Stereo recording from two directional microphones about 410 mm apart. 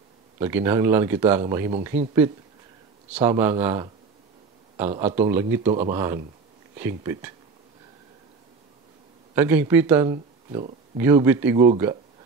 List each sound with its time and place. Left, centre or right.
0.4 s speech: centre
9.3 s speech: centre